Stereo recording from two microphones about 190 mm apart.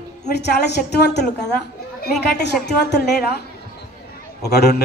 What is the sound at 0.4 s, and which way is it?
A woman's voice, 65° left (ahead or behind).